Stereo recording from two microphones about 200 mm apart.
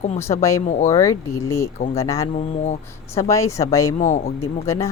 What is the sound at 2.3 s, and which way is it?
Speech, 35° left (ahead or behind).